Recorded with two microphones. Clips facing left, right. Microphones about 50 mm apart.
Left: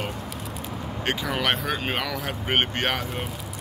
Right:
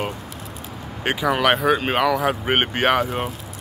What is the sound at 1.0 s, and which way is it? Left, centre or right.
Speech, centre.